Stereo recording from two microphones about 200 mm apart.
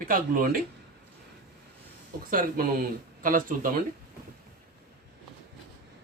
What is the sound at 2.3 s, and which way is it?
Speech, 45° right (ahead or behind).